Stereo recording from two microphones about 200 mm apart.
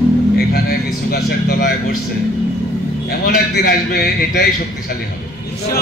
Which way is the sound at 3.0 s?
50° left (ahead or behind).